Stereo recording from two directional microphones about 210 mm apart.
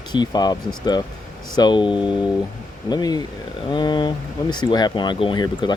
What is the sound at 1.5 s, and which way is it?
Speech, 20° left (ahead or behind).